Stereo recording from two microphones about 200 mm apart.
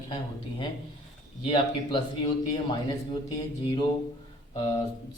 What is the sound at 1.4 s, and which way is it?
Speech, 25° left (ahead or behind).